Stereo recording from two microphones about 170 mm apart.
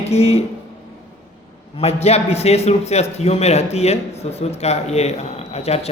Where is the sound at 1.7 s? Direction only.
40° left (ahead or behind).